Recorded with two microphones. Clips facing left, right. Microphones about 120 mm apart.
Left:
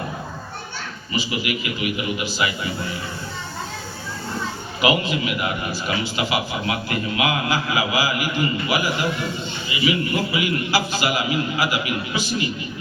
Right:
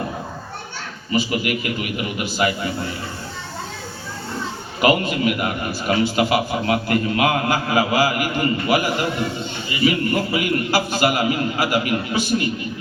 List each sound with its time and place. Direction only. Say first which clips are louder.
1.1 s a man's voice: right 4 dB; 50° right (ahead or behind)
4.8 s a man's voice: right 3 dB; 50° right (ahead or behind)